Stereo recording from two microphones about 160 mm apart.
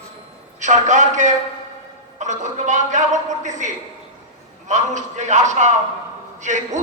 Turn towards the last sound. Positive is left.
turn(degrees=-50)  # may be behind; listen again after turning